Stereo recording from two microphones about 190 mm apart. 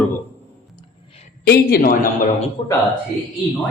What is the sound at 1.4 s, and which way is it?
Speech, 55° left (ahead or behind).